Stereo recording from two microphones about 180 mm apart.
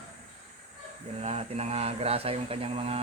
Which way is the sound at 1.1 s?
35° right (ahead or behind).